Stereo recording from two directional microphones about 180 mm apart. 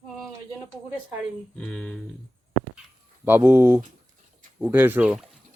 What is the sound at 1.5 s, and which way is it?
Speech, 5° left (ahead or behind).